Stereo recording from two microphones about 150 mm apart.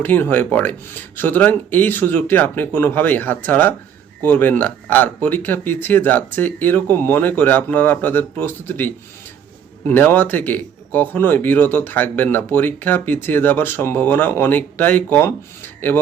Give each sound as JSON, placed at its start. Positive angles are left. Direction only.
{"t": 0.0, "sound": "speech", "side_deg": 15}